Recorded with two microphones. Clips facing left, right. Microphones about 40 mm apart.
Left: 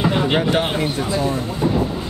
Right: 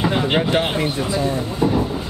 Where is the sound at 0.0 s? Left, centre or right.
Centre.